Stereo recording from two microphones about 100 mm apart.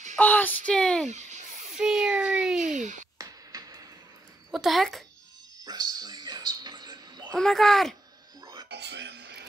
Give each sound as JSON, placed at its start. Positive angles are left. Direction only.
{"t": 0.2, "sound": "speech", "side_deg": 15}
{"t": 1.7, "sound": "a child's voice", "side_deg": -5}
{"t": 3.2, "sound": "music", "side_deg": -35}
{"t": 4.5, "sound": "a child's voice", "side_deg": 0}
{"t": 5.7, "sound": "a sound", "side_deg": -40}
{"t": 7.3, "sound": "a child's voice", "side_deg": 5}